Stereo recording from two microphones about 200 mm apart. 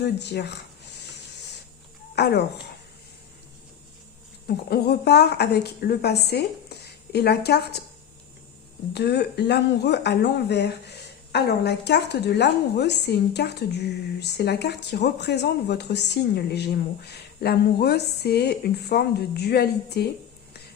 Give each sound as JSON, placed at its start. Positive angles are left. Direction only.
{"t": 0.0, "sound": "speech", "side_deg": 55}
{"t": 2.1, "sound": "speech", "side_deg": 55}
{"t": 4.4, "sound": "speech", "side_deg": 50}
{"t": 8.9, "sound": "speech", "side_deg": 55}